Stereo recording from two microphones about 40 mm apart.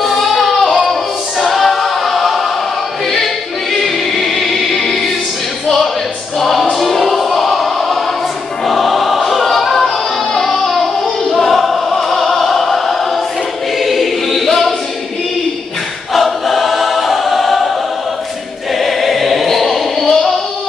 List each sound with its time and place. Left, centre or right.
0.0 s child singing: centre
1.4 s choir: centre
3.7 s music: centre
6.4 s music: centre
7.5 s choir: centre
8.6 s music: centre
13.8 s choir: centre
16.1 s choir: centre
18.8 s choir: centre
20.1 s a sound: centre